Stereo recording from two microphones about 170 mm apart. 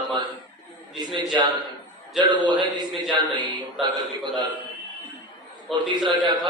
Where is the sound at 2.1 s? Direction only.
25° right (ahead or behind).